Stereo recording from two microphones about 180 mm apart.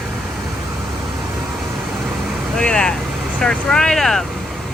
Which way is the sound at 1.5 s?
Centre (ahead or behind).